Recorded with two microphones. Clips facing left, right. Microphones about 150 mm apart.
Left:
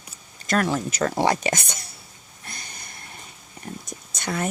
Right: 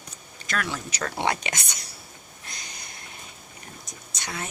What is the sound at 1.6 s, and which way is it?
Speech, 50° left (ahead or behind).